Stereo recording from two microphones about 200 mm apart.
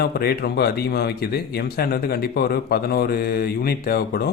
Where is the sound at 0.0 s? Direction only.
50° left (ahead or behind).